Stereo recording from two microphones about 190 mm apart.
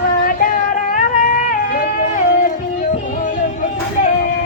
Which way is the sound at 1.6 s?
50° left (ahead or behind).